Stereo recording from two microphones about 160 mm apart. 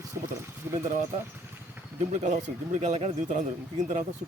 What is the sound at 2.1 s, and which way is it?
Speech, 50° right (ahead or behind).